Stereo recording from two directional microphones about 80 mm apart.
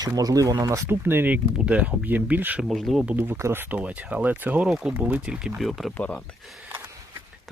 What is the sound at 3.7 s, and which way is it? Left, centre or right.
Speech, centre.